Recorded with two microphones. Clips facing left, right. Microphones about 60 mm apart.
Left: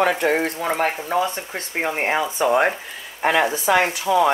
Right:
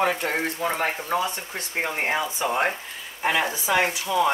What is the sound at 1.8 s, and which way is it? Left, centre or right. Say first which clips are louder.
Speech: left 4 dB; left.